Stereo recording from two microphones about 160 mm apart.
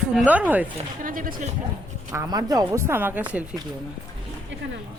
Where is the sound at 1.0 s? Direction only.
60° right (ahead or behind).